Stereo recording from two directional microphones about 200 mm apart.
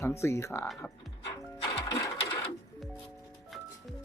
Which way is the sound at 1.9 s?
15° left (ahead or behind).